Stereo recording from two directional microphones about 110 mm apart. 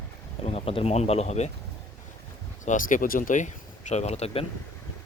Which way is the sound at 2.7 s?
90° left.